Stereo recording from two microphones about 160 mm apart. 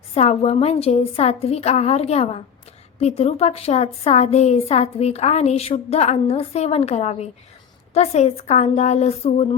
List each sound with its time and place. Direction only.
0.1 s a woman's voice: 40° left (ahead or behind)